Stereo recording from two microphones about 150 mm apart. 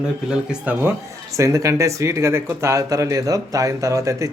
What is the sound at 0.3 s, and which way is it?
Speech, 10° right (ahead or behind).